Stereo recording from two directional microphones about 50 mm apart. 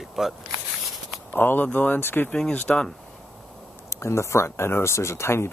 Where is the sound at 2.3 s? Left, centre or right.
Centre.